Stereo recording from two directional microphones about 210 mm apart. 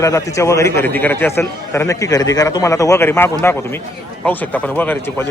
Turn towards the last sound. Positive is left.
turn(degrees=10)  # may be behind; listen again after turning